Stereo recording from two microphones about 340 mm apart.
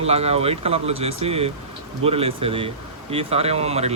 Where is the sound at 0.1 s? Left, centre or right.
Centre.